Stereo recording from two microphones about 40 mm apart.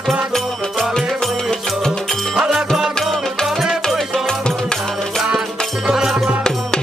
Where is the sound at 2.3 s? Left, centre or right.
Centre.